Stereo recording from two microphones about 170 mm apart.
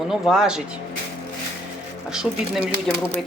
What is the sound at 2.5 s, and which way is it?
Speech, 30° right (ahead or behind).